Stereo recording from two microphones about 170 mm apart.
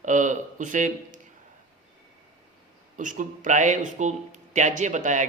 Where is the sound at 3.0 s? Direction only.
50° right (ahead or behind).